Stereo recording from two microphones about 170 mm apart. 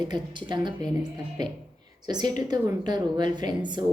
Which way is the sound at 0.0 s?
25° right (ahead or behind).